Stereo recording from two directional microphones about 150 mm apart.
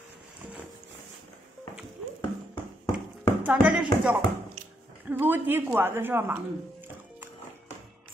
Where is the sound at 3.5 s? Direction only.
10° right (ahead or behind).